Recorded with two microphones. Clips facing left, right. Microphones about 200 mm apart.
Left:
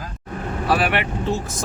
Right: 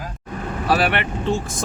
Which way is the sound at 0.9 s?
5° left (ahead or behind).